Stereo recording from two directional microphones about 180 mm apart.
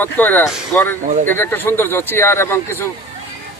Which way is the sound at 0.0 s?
10° left (ahead or behind).